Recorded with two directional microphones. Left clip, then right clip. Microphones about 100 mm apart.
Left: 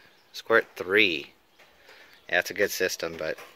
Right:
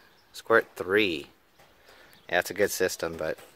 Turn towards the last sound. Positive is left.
turn(degrees=-25)  # may be behind; listen again after turning